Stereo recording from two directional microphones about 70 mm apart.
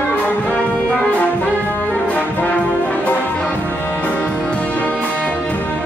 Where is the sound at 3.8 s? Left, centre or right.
Left.